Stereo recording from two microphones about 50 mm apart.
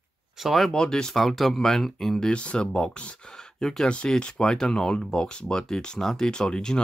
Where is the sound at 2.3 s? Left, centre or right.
Left.